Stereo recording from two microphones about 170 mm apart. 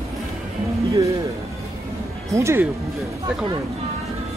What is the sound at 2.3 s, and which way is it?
Speech, 15° right (ahead or behind).